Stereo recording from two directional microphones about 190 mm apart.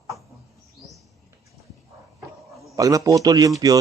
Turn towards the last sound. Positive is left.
turn(degrees=-20)  # may be behind; listen again after turning